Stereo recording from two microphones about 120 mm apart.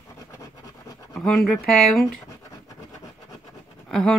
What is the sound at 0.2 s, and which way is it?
Scratch, 25° left (ahead or behind).